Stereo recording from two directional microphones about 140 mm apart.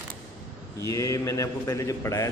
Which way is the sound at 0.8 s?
25° left (ahead or behind).